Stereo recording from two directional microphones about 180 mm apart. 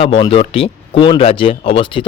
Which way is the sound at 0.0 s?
30° left (ahead or behind).